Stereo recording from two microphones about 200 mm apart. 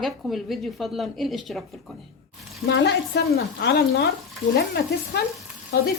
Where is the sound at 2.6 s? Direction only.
55° left (ahead or behind).